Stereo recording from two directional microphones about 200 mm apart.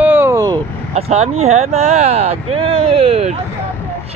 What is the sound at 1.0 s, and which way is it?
Speech, 30° right (ahead or behind).